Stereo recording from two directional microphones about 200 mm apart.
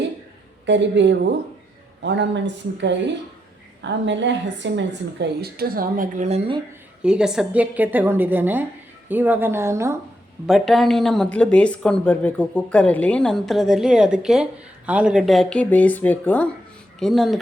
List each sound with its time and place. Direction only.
0.6 s a woman's voice: 65° right (ahead or behind)
3.8 s a woman's voice: 65° right (ahead or behind); by 6.6 s 35° right (ahead or behind)
7.0 s a woman's voice: 5° right (ahead or behind)
10.4 s speech: centre (ahead or behind)